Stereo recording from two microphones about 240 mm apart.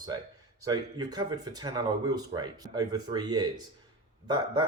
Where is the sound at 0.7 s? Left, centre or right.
Centre.